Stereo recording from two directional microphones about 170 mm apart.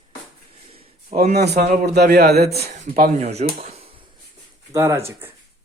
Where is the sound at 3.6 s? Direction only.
35° right (ahead or behind).